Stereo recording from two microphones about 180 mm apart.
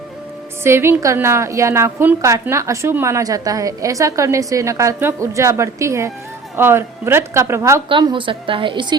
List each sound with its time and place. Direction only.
0.6 s a woman's voice: 15° right (ahead or behind)
7.9 s a woman's voice: 25° right (ahead or behind)